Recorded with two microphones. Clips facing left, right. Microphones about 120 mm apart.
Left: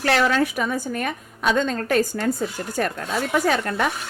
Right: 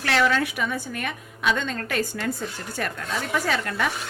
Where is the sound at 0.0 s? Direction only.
40° left (ahead or behind).